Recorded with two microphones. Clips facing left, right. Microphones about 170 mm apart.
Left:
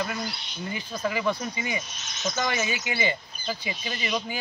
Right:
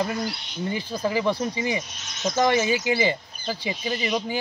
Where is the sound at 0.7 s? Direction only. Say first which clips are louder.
Right 4 dB; 30° right (ahead or behind).